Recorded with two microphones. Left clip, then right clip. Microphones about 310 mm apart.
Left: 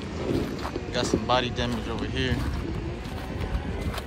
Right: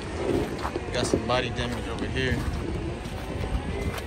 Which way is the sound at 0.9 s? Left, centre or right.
Centre.